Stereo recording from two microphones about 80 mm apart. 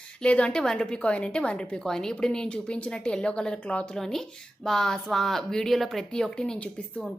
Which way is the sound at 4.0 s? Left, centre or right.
Centre.